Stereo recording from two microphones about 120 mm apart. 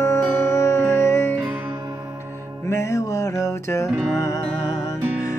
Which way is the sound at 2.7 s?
25° left (ahead or behind).